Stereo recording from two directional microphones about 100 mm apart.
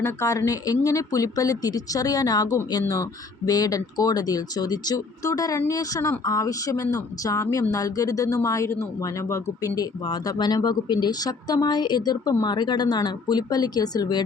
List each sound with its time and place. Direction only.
0.0 s speech: 30° left (ahead or behind)